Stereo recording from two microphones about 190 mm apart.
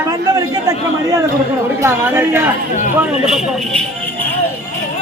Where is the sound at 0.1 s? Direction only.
20° right (ahead or behind).